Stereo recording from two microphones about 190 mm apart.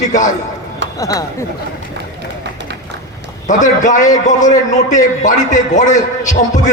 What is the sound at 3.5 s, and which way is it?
A man's voice, 40° left (ahead or behind).